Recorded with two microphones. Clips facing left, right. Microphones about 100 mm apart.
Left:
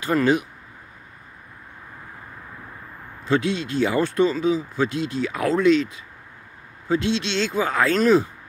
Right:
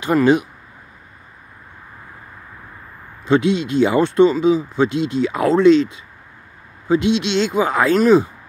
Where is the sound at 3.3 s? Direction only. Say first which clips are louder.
Right 6 dB; 20° right (ahead or behind).